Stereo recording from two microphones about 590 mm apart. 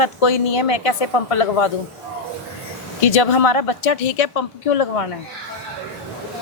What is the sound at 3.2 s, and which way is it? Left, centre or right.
Speech, left.